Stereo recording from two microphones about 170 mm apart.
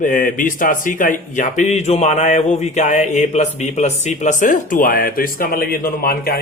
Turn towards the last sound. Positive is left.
turn(degrees=60)  # may be behind; listen again after turning